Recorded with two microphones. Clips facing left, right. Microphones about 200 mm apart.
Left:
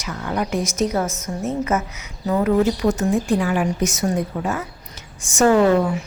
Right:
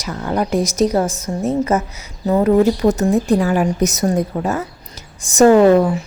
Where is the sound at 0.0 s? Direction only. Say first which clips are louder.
Right 4 dB; 35° right (ahead or behind).